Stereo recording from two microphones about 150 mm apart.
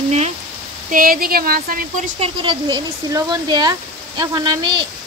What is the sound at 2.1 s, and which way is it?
Speech, 35° right (ahead or behind).